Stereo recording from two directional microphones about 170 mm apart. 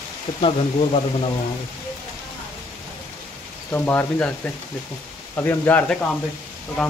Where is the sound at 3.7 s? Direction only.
10° left (ahead or behind).